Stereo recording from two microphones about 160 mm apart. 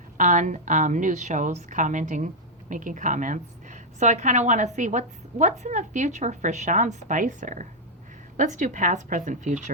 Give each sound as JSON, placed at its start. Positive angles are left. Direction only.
{"t": 0.2, "sound": "a woman's voice", "side_deg": -50}